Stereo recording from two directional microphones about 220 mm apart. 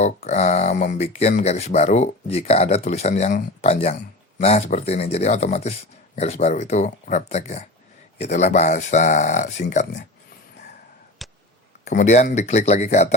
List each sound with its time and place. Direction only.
0.0 s speech: 30° left (ahead or behind)
11.2 s a sound: centre (ahead or behind)
11.9 s speech: 35° left (ahead or behind)